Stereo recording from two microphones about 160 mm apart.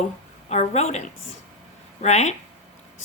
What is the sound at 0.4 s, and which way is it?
A woman's voice, 45° left (ahead or behind).